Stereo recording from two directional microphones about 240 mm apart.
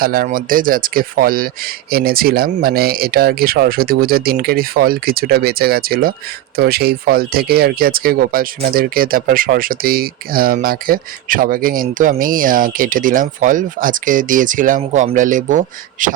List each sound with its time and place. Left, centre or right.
0.0 s speech: right